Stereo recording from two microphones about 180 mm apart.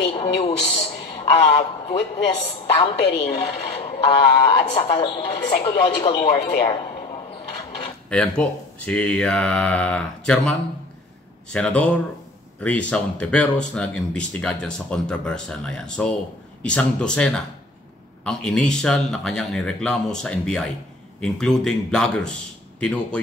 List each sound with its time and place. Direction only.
0.1 s a man's voice: 30° left (ahead or behind)
8.1 s speech: 5° left (ahead or behind)
11.5 s speech: 5° left (ahead or behind)